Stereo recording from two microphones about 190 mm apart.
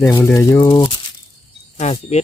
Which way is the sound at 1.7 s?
35° left (ahead or behind).